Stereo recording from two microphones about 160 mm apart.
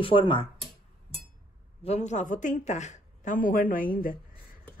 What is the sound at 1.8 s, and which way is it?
Speech, 45° left (ahead or behind).